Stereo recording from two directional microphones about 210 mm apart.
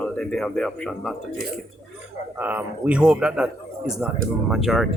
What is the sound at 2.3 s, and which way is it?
Speech, 10° right (ahead or behind).